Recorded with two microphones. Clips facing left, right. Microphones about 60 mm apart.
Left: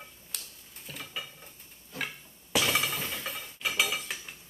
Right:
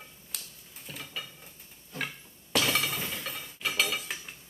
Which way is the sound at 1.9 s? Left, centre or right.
Centre.